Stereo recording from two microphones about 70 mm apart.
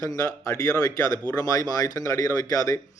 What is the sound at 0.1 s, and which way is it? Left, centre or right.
Speech, left.